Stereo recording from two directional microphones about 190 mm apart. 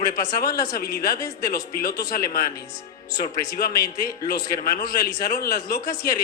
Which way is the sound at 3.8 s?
20° left (ahead or behind).